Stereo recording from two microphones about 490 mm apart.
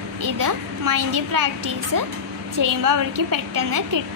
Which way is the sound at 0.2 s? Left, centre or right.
Right.